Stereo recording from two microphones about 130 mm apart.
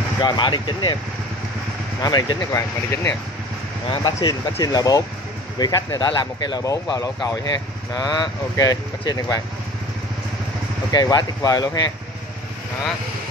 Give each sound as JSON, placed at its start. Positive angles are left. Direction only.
{"t": 0.2, "sound": "speech", "side_deg": 35}
{"t": 2.0, "sound": "speech", "side_deg": 30}
{"t": 4.0, "sound": "speech", "side_deg": 30}
{"t": 10.9, "sound": "speech", "side_deg": 30}